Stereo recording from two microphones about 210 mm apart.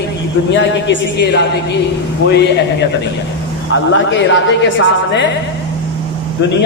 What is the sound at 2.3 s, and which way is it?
Speech, 55° left (ahead or behind).